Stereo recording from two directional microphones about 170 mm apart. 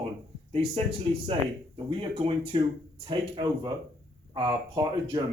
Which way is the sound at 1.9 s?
30° right (ahead or behind).